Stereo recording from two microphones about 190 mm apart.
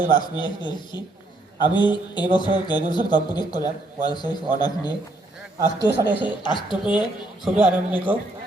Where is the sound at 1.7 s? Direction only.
25° left (ahead or behind).